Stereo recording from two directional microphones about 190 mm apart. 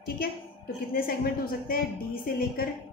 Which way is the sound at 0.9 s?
50° left (ahead or behind).